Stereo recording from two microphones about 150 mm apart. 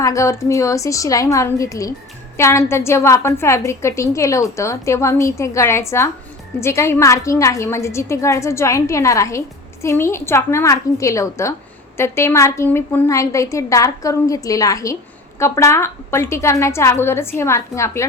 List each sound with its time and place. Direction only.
0.0 s a woman's voice: 20° left (ahead or behind)